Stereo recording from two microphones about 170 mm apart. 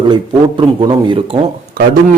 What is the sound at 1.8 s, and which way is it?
Speech, 55° right (ahead or behind).